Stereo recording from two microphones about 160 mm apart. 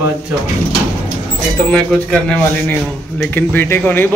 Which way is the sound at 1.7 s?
5° left (ahead or behind).